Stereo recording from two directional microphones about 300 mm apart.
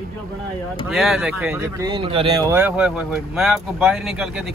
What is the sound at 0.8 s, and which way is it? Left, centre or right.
Speech, centre.